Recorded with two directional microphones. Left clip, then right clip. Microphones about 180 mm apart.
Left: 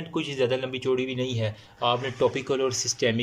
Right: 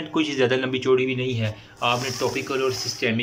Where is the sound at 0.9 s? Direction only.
30° left (ahead or behind).